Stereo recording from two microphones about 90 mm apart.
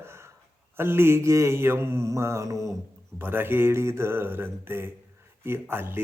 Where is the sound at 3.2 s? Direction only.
25° right (ahead or behind).